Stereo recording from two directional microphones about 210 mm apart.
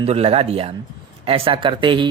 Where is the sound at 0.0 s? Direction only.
30° right (ahead or behind).